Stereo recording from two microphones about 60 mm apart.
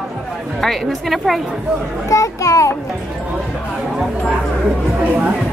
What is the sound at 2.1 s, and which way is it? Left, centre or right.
Speech, left.